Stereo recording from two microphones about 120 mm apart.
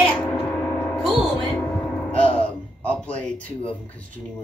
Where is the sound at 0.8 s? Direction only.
5° left (ahead or behind).